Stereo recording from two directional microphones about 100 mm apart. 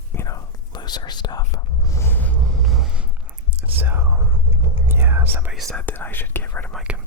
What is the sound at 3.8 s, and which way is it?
Speech, 20° right (ahead or behind).